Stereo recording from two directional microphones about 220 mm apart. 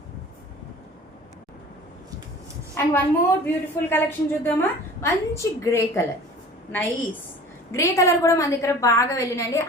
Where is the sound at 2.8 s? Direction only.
10° left (ahead or behind).